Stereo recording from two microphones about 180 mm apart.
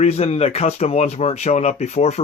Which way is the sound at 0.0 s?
35° left (ahead or behind).